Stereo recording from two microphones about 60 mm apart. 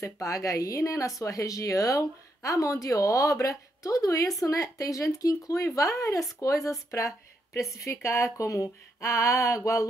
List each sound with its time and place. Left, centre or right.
0.0 s speech: left